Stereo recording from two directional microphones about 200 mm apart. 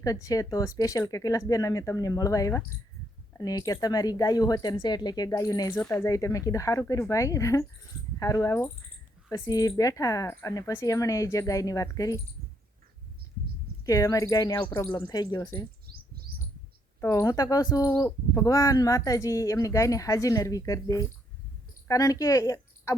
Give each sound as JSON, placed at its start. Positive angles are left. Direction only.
{"t": 0.0, "sound": "speech", "side_deg": 15}
{"t": 13.8, "sound": "speech", "side_deg": 15}
{"t": 17.0, "sound": "speech", "side_deg": 15}